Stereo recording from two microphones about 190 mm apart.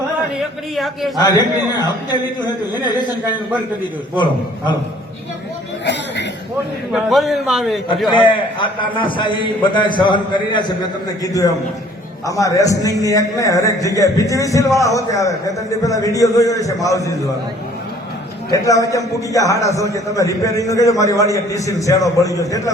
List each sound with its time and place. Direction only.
0.8 s a man's voice: centre (ahead or behind)
1.2 s a man's voice: 20° left (ahead or behind)
5.8 s cough: 65° left (ahead or behind)
6.9 s a man's voice: centre (ahead or behind)
8.1 s a man's voice: 25° left (ahead or behind)
18.5 s a man's voice: 15° left (ahead or behind)